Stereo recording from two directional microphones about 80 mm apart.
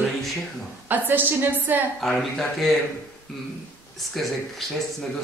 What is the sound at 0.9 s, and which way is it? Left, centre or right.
Speech, right.